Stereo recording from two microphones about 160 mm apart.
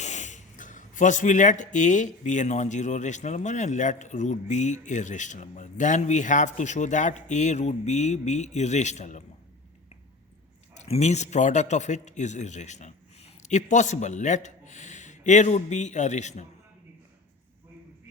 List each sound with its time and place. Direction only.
0.0 s speech: 45° left (ahead or behind)
10.8 s speech: 40° left (ahead or behind)